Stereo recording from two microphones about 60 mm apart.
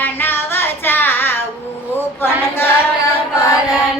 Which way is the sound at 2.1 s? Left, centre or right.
Left.